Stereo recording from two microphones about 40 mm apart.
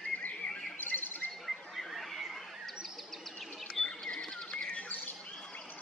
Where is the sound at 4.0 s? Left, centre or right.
Centre.